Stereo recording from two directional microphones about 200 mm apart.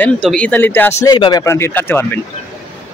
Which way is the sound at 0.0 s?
5° left (ahead or behind).